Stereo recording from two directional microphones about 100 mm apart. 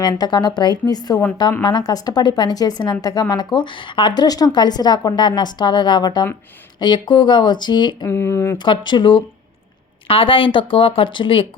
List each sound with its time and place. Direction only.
0.0 s a woman's voice: 45° left (ahead or behind)
8.0 s speech: 25° left (ahead or behind)
8.5 s a woman's voice: 50° left (ahead or behind)
10.1 s speech: 60° left (ahead or behind)